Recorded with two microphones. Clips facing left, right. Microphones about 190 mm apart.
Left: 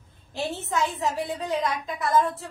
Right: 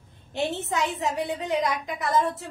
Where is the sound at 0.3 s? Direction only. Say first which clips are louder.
Right 2 dB; 20° right (ahead or behind).